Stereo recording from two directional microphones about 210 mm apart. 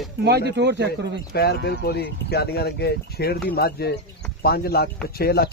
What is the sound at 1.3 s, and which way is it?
Speech, 50° left (ahead or behind).